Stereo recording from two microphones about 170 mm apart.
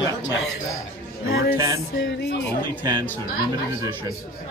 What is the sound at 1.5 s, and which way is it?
Music, 20° right (ahead or behind).